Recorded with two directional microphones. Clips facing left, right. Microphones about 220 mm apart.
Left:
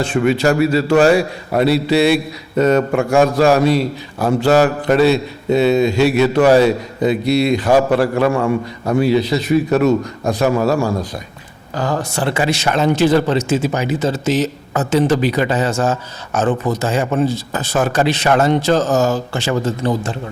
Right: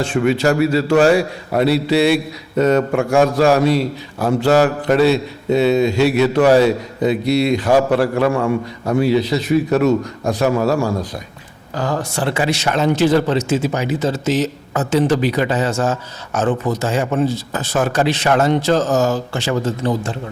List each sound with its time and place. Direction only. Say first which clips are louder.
0.0 s a man's voice: left 1 dB; 10° left (ahead or behind)